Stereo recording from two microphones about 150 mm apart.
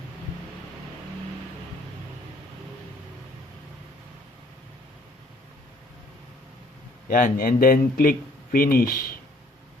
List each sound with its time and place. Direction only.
7.1 s a man's voice: 70° left (ahead or behind)